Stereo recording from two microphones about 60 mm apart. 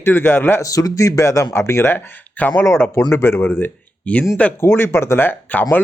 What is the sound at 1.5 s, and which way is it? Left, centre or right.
Speech, left.